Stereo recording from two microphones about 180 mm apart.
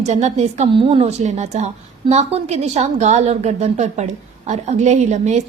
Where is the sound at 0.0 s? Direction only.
40° right (ahead or behind).